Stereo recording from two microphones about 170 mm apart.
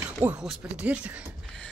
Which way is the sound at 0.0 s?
10° right (ahead or behind).